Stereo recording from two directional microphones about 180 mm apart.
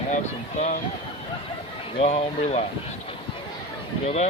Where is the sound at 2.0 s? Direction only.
35° left (ahead or behind).